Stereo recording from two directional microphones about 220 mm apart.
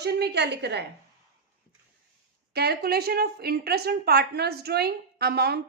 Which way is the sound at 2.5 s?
45° right (ahead or behind).